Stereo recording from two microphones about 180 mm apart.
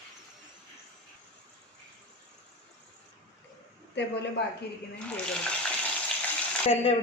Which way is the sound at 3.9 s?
75° left (ahead or behind).